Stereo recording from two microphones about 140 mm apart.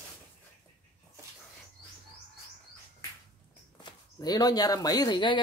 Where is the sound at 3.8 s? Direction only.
30° left (ahead or behind).